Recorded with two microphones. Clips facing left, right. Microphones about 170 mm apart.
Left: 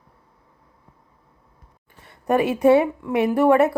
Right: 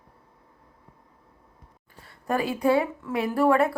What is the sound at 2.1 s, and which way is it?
Speech, 20° left (ahead or behind).